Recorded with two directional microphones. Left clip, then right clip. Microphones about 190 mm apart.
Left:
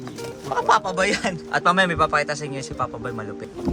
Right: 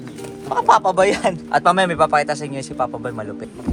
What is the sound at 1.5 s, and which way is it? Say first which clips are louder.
A man's voice: right 3 dB; centre (ahead or behind).